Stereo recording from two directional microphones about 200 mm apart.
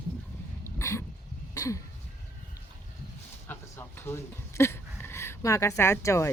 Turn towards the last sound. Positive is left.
turn(degrees=15)  # may be behind; listen again after turning